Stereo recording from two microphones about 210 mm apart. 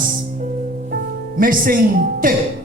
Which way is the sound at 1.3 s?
40° right (ahead or behind).